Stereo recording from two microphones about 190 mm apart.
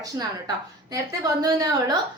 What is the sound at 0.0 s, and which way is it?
A woman's voice, 20° right (ahead or behind).